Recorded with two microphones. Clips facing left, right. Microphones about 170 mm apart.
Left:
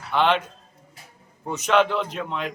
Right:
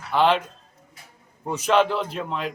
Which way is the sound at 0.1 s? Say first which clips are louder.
Right 1 dB; 5° right (ahead or behind).